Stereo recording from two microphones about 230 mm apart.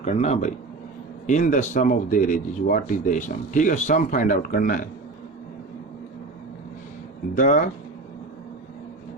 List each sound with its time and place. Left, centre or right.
0.0 s speech: left
7.3 s speech: left